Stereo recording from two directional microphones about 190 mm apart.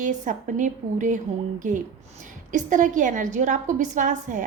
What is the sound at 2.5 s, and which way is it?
A woman's voice, 40° right (ahead or behind).